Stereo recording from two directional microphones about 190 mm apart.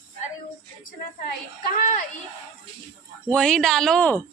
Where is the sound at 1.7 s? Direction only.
45° left (ahead or behind).